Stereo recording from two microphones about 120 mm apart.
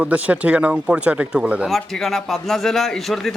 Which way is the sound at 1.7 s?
Centre (ahead or behind).